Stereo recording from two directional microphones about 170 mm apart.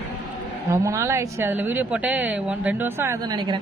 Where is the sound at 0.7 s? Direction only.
15° right (ahead or behind).